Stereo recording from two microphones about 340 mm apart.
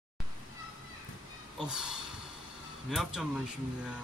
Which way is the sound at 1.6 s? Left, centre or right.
Centre.